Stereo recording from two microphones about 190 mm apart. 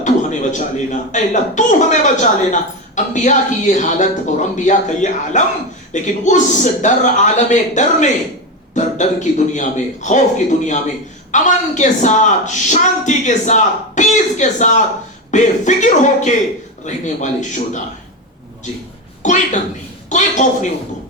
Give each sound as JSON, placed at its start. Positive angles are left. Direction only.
{"t": 0.0, "sound": "a sound", "side_deg": 40}
{"t": 1.1, "sound": "a woman's voice", "side_deg": 40}
{"t": 19.2, "sound": "a woman's voice", "side_deg": 40}